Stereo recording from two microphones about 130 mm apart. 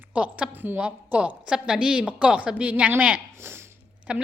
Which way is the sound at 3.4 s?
20° right (ahead or behind).